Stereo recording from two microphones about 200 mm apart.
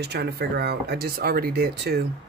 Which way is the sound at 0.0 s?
55° right (ahead or behind).